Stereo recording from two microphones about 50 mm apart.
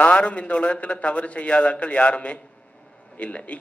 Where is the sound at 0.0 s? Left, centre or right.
Left.